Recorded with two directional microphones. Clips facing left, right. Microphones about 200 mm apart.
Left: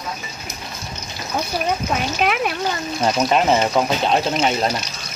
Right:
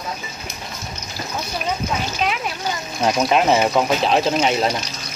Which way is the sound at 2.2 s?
60° left (ahead or behind).